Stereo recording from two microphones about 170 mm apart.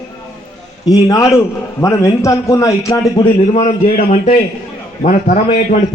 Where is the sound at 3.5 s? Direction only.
45° left (ahead or behind).